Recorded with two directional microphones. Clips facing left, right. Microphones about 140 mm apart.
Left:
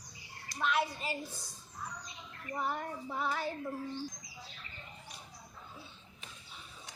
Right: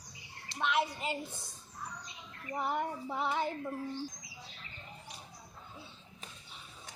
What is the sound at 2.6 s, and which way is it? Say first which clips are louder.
Speech: right 3 dB; 20° right (ahead or behind).